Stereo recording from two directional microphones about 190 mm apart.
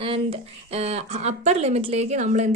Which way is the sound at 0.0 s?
30° right (ahead or behind).